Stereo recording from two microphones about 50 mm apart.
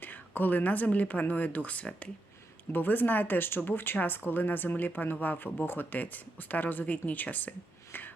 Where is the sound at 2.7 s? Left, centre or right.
Left.